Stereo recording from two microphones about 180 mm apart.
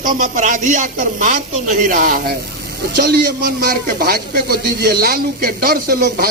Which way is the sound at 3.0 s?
65° right (ahead or behind).